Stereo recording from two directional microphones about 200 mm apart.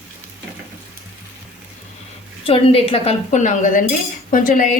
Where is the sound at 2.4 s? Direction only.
30° left (ahead or behind).